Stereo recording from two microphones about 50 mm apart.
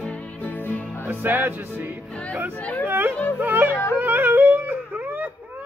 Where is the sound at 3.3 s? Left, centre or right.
Right.